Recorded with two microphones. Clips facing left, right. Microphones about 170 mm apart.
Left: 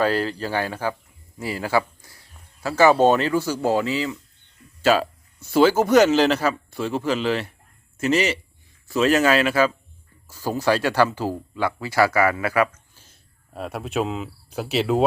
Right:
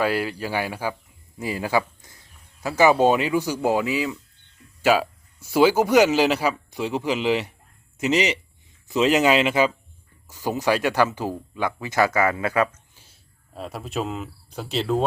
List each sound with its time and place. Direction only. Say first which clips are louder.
0.0 s speech: left 2 dB; 10° right (ahead or behind)
13.5 s speech: left 3 dB; centre (ahead or behind)